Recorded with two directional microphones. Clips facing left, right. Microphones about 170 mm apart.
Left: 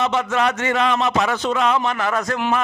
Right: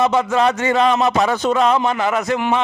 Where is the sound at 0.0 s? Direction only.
35° right (ahead or behind).